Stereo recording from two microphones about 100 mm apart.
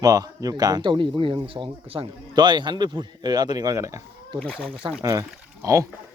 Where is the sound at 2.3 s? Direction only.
45° right (ahead or behind).